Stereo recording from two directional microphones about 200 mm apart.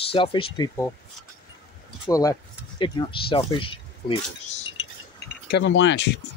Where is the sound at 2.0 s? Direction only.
15° left (ahead or behind).